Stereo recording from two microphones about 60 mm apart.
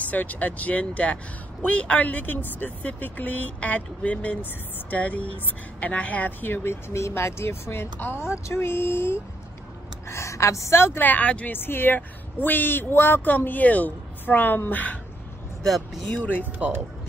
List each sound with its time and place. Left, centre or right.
0.0 s speech: left
10.0 s a woman's voice: left
11.0 s speech: left
11.5 s speech: left
15.6 s speech: centre
16.6 s speech: centre